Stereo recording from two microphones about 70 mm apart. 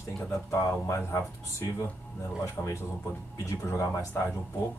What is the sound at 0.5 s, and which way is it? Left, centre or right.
Speech, left.